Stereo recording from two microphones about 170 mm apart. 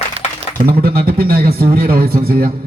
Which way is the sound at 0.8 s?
60° right (ahead or behind).